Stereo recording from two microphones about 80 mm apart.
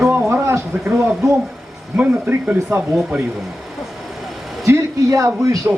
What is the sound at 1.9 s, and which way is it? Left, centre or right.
Speech, right.